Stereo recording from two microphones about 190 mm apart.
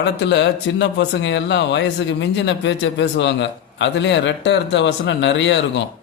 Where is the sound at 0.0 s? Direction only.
65° left (ahead or behind).